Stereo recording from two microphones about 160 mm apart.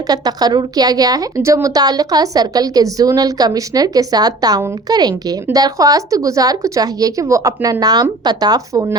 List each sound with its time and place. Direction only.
0.1 s speech: 25° right (ahead or behind)